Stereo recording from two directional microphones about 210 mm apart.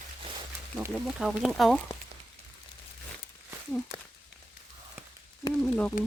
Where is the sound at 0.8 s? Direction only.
5° right (ahead or behind).